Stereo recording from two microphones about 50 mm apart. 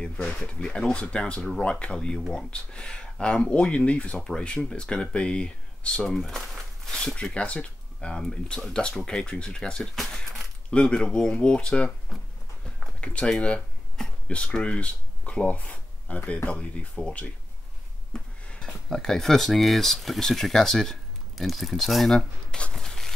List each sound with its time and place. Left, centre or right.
0.7 s speech: left
6.1 s speech: centre
7.2 s speech: left; by 10.2 s centre
10.7 s speech: left
12.1 s speech: centre
13.0 s speech: left
18.1 s a sound: centre
18.9 s speech: centre
22.5 s a sound: centre